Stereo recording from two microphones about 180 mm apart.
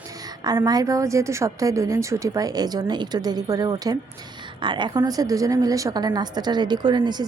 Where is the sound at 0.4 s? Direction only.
20° right (ahead or behind).